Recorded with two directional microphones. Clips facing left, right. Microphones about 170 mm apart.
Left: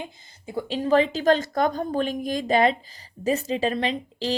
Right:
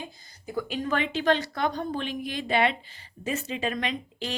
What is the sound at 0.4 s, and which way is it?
A woman's voice, 30° left (ahead or behind).